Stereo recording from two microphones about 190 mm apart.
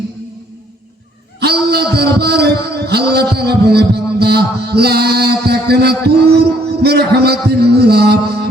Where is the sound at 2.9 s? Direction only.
55° right (ahead or behind).